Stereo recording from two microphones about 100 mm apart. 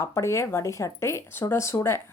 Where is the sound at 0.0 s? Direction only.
30° left (ahead or behind).